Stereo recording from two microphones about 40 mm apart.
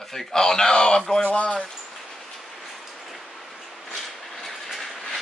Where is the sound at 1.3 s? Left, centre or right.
Left.